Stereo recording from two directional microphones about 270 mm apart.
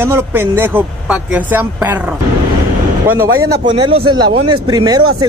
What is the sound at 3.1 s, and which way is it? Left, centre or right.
Speech, centre.